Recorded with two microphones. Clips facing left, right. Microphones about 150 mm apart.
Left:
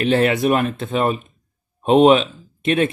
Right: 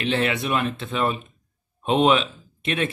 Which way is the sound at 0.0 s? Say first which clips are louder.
Left 7 dB; 50° left (ahead or behind).